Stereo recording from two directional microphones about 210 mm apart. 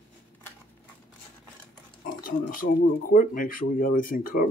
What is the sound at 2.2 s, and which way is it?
Speech, 40° left (ahead or behind).